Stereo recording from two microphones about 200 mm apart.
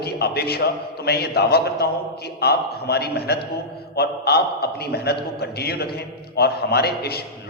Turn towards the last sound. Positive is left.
turn(degrees=50)  # may be behind; listen again after turning